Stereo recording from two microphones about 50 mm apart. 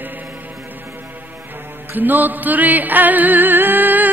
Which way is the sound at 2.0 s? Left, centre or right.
Right.